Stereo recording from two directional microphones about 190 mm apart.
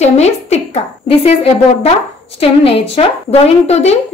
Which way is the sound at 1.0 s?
30° left (ahead or behind).